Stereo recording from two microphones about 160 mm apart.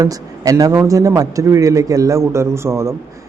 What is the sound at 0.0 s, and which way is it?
A man's voice, 20° right (ahead or behind).